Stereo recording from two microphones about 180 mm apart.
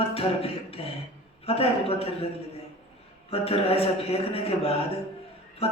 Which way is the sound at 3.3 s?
35° left (ahead or behind).